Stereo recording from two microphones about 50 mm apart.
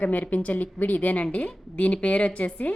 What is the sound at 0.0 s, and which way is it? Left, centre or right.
A woman's voice, left.